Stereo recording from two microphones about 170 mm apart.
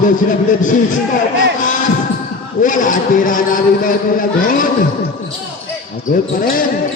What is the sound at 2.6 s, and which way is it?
A man's voice, 50° left (ahead or behind).